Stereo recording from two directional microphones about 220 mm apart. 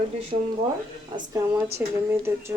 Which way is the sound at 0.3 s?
25° right (ahead or behind).